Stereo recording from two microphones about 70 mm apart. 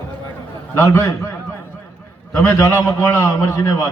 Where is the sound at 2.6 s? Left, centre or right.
Left.